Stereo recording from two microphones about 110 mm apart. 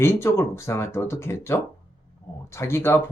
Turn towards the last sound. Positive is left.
turn(degrees=20)  # may be behind; listen again after turning